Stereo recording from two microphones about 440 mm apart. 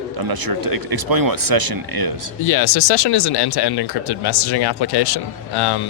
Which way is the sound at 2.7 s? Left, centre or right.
Left.